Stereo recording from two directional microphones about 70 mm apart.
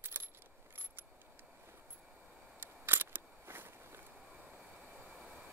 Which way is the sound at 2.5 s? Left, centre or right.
Right.